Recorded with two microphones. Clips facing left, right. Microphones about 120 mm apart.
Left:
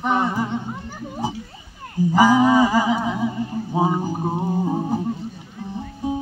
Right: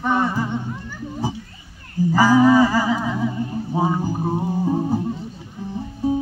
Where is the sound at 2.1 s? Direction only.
15° left (ahead or behind).